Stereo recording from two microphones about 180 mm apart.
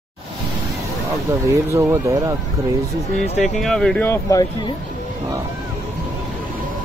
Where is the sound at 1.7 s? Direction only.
15° right (ahead or behind).